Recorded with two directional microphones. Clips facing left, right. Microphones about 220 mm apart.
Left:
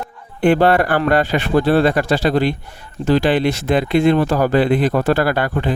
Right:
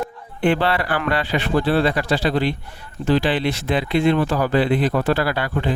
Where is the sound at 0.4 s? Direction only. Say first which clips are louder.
Left 6 dB; 45° left (ahead or behind).